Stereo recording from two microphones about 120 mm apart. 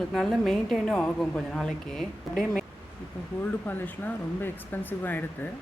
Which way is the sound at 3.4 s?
15° left (ahead or behind).